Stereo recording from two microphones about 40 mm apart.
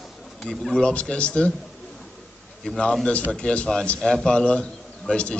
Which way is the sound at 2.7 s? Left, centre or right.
Left.